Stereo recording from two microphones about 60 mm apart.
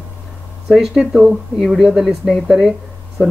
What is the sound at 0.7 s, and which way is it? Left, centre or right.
Speech, centre.